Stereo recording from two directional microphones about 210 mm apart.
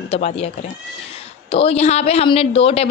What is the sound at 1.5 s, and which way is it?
A woman's voice, 30° left (ahead or behind).